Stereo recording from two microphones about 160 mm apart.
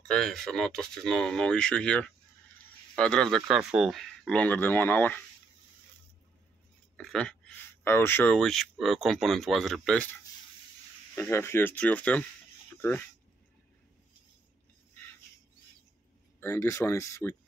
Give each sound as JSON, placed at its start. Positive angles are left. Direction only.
{"t": 0.0, "sound": "speech", "side_deg": 5}
{"t": 7.0, "sound": "speech", "side_deg": 5}
{"t": 11.1, "sound": "speech", "side_deg": 15}
{"t": 16.3, "sound": "speech", "side_deg": 15}